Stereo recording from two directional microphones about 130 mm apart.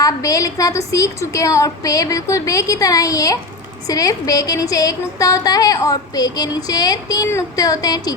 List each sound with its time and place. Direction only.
0.0 s a woman's voice: 25° left (ahead or behind)